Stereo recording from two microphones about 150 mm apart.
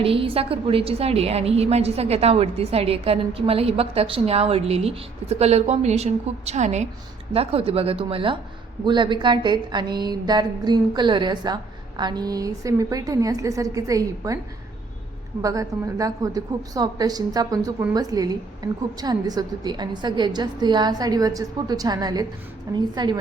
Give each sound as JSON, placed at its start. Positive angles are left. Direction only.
{"t": 0.0, "sound": "a woman's voice", "side_deg": -40}
{"t": 15.4, "sound": "a woman's voice", "side_deg": -20}